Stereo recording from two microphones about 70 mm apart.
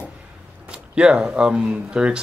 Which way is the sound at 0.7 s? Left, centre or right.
Centre.